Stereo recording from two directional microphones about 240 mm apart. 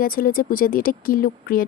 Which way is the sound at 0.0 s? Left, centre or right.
Left.